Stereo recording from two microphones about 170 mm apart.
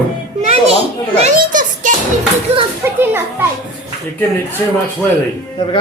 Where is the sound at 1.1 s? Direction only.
45° right (ahead or behind).